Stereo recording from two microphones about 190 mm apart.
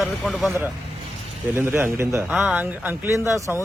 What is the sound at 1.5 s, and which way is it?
Speech, 10° right (ahead or behind).